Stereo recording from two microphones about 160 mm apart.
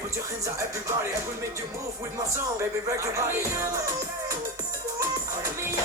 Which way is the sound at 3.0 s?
15° right (ahead or behind).